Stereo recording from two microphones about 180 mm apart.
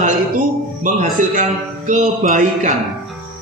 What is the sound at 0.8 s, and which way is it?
A man's voice, 45° right (ahead or behind).